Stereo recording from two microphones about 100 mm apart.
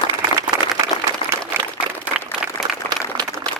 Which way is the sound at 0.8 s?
30° right (ahead or behind).